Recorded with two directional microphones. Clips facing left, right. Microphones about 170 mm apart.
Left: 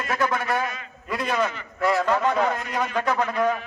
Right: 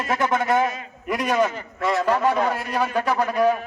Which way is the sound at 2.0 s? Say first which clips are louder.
Right 1 dB; 10° right (ahead or behind).